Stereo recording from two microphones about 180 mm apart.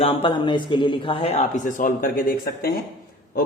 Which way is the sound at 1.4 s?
45° left (ahead or behind).